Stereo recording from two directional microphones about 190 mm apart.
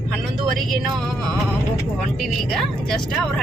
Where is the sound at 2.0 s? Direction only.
Centre (ahead or behind).